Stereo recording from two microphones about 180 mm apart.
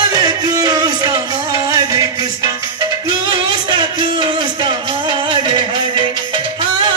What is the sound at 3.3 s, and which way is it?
Music, 25° right (ahead or behind).